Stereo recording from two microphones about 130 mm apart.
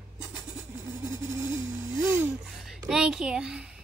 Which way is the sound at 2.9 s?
5° right (ahead or behind).